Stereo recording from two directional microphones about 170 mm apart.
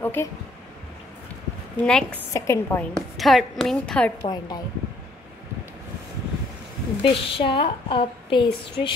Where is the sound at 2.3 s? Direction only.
15° left (ahead or behind).